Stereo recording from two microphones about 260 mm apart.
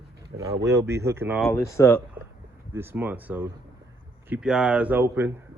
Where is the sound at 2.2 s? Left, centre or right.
Centre.